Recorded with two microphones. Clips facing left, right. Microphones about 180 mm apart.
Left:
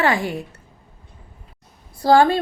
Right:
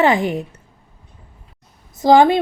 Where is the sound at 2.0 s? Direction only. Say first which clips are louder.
Right 3 dB; 20° right (ahead or behind).